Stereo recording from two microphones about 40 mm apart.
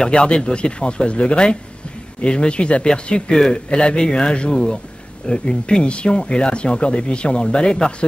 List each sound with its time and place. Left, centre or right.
0.0 s speech: left